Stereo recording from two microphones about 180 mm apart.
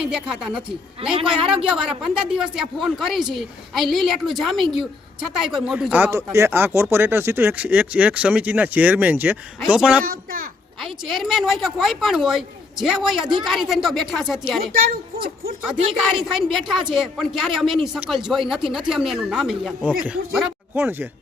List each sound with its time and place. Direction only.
0.0 s speech: 5° right (ahead or behind)
1.0 s a man's voice: 30° right (ahead or behind)
1.6 s speech: centre (ahead or behind)
15.6 s speech: centre (ahead or behind)
20.7 s speech: 15° right (ahead or behind)